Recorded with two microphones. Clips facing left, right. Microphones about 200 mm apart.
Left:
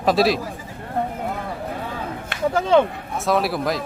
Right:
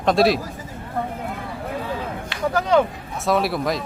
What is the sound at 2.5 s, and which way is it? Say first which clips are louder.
Speech: left 2 dB; 25° left (ahead or behind).